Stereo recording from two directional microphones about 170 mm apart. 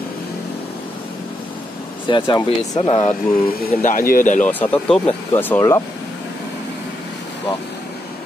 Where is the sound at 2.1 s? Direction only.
30° left (ahead or behind).